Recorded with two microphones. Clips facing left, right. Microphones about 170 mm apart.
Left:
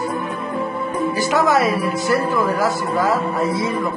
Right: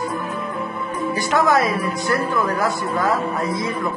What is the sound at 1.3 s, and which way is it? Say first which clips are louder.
A woman's voice: even; centre (ahead or behind).